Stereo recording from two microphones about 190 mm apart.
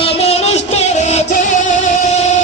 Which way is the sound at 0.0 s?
30° left (ahead or behind).